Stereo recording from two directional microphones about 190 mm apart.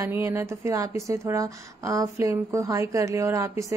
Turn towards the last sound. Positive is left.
turn(degrees=-15)  # may be behind; listen again after turning